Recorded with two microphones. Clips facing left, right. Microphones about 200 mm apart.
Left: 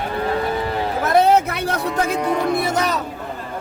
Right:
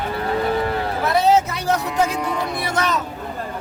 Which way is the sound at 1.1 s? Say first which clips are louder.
Left 2 dB; 55° left (ahead or behind).